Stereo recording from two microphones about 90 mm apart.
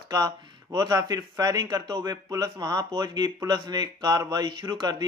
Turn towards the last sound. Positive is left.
turn(degrees=-50)  # may be behind; listen again after turning